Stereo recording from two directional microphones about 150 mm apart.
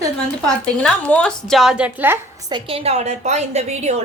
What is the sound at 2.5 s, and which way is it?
A woman's voice, 40° right (ahead or behind).